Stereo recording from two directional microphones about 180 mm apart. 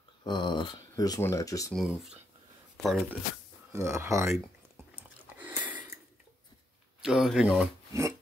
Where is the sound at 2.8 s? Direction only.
Centre (ahead or behind).